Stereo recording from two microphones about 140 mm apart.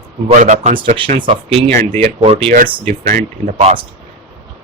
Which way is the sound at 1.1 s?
45° right (ahead or behind).